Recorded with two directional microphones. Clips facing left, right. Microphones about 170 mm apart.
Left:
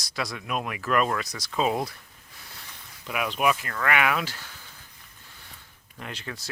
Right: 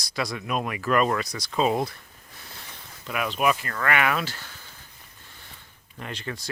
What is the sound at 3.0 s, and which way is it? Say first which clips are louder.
Speech: right 1 dB; 5° left (ahead or behind).